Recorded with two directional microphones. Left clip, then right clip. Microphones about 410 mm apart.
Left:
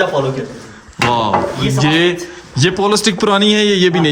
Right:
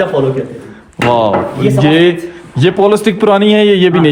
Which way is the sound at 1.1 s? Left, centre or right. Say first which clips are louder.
Right 4 dB; centre.